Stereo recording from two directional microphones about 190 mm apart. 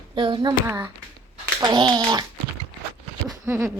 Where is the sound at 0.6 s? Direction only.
10° right (ahead or behind).